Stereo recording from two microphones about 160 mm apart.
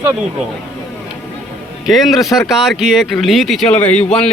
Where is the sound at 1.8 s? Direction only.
Centre (ahead or behind).